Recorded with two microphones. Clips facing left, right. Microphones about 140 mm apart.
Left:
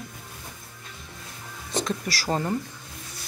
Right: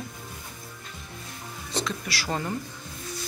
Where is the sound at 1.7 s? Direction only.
45° left (ahead or behind).